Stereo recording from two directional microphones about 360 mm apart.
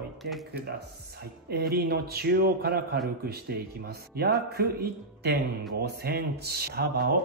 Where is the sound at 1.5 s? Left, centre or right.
Right.